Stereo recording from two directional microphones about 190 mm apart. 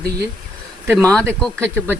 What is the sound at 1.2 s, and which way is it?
Speech, 15° right (ahead or behind).